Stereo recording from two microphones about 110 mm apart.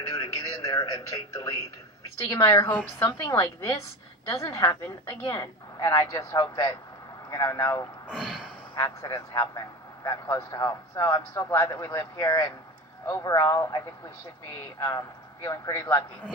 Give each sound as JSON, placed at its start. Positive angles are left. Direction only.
{"t": 0.1, "sound": "a man's voice", "side_deg": 30}
{"t": 3.3, "sound": "a man's voice", "side_deg": 40}
{"t": 4.3, "sound": "a man's voice", "side_deg": 30}
{"t": 6.4, "sound": "a man's voice", "side_deg": 45}
{"t": 8.1, "sound": "speech", "side_deg": 0}
{"t": 8.7, "sound": "a man's voice", "side_deg": 35}